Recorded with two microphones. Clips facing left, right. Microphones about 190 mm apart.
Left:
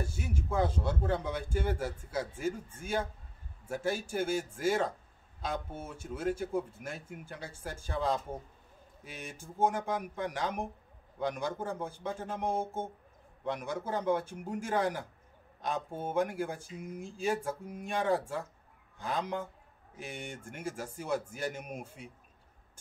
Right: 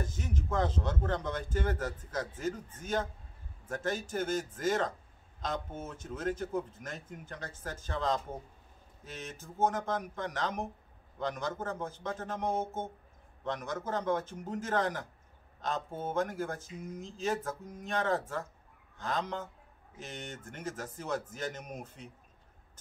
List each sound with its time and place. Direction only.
0.0 s speech: 10° left (ahead or behind)